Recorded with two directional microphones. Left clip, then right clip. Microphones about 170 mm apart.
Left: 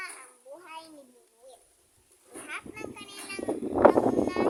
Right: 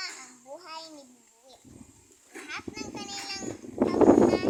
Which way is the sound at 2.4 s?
15° left (ahead or behind).